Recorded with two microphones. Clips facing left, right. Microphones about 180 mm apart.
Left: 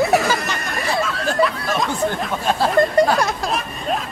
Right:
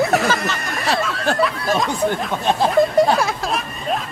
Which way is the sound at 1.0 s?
Centre (ahead or behind).